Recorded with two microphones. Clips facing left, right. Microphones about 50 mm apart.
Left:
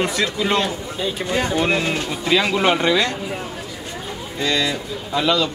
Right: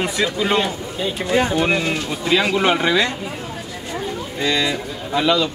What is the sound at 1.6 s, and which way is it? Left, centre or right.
Speech, centre.